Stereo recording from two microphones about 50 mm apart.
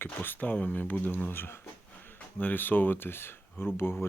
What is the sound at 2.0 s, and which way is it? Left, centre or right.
A man's voice, left.